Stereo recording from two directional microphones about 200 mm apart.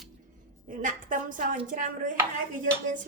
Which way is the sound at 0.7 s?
40° right (ahead or behind).